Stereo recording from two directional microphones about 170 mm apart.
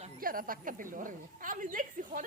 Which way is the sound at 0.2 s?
55° right (ahead or behind).